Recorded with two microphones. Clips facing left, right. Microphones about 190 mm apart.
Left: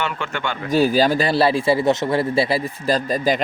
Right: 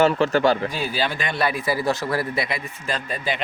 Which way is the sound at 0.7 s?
45° left (ahead or behind).